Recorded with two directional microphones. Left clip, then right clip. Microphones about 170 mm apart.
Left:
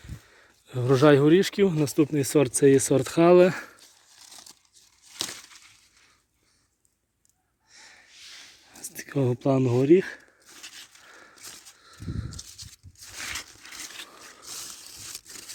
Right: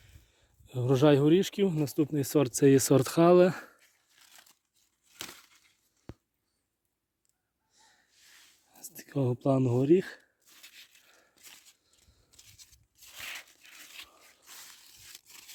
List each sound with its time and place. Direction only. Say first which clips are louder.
0.0 s speech: left 13 dB; 35° right (ahead or behind)
7.7 s snort: left 13 dB; 15° right (ahead or behind)
8.7 s a sound: left 6 dB; 25° right (ahead or behind)
9.8 s speech: left 7 dB; 30° right (ahead or behind)
11.0 s dog: left 13 dB; 10° right (ahead or behind)